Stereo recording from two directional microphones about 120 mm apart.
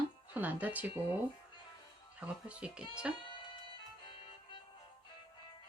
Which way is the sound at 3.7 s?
45° left (ahead or behind).